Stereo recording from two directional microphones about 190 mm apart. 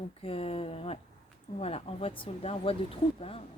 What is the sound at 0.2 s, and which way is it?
A woman's voice, 30° left (ahead or behind).